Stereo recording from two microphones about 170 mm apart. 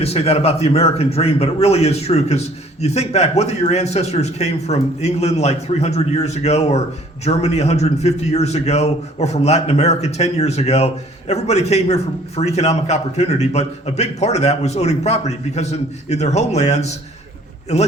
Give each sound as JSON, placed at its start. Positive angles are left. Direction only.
{"t": 0.0, "sound": "a man's voice", "side_deg": 35}